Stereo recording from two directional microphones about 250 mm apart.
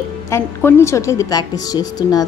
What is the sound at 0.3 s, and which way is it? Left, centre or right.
A woman's voice, centre.